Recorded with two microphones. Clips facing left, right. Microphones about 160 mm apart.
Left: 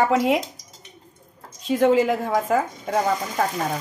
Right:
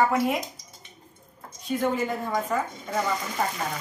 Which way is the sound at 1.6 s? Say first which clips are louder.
Left 8 dB; 90° left.